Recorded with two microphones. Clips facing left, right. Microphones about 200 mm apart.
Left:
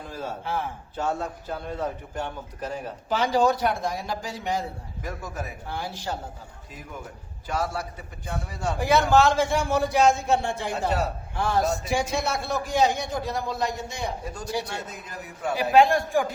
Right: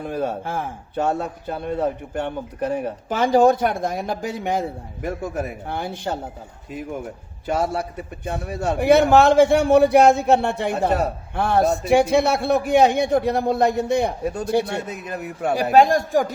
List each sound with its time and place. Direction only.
0.0 s a man's voice: 60° right (ahead or behind)
7.4 s a man's voice: 60° right (ahead or behind)
15.7 s speech: 45° right (ahead or behind)